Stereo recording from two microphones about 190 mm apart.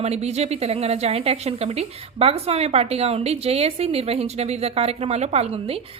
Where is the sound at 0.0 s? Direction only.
35° right (ahead or behind).